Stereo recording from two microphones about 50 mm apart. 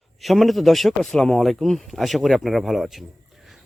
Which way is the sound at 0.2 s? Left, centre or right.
Centre.